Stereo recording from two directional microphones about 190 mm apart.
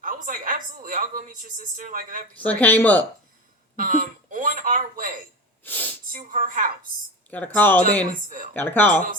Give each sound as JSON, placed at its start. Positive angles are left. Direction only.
{"t": 0.0, "sound": "a woman's voice", "side_deg": -45}
{"t": 2.3, "sound": "speech", "side_deg": 10}
{"t": 3.8, "sound": "a sound", "side_deg": -45}
{"t": 5.6, "sound": "a sound", "side_deg": 10}
{"t": 6.1, "sound": "speech", "side_deg": -45}
{"t": 7.3, "sound": "speech", "side_deg": 10}